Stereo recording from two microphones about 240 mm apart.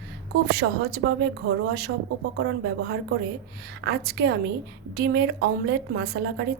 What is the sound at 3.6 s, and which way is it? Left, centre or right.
A woman's voice, right.